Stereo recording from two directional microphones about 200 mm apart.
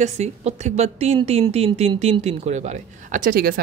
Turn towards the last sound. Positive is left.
turn(degrees=-45)  # may be behind; listen again after turning